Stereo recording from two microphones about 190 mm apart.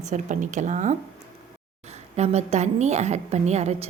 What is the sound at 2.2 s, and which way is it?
A woman's voice, 35° right (ahead or behind).